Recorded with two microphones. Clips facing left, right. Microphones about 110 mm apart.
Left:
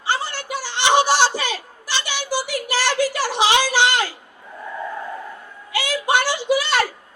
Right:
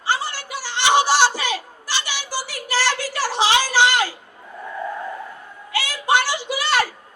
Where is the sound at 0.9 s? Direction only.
15° left (ahead or behind).